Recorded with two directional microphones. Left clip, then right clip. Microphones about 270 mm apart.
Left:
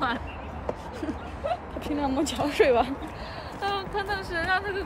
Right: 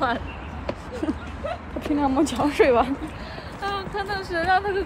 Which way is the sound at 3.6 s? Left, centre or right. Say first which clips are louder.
Right 1 dB; centre.